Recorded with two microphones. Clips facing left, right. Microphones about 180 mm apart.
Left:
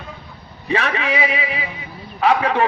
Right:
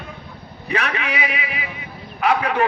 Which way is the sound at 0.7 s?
30° left (ahead or behind).